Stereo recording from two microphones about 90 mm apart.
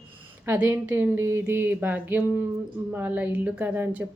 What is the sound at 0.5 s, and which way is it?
Speech, 25° right (ahead or behind).